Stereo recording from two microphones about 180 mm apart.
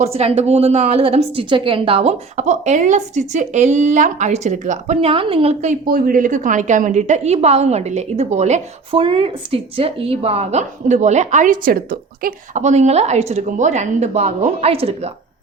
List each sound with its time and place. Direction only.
0.0 s a woman's voice: 35° right (ahead or behind)
5.8 s a woman's voice: 55° right (ahead or behind)
12.6 s a woman's voice: 40° right (ahead or behind)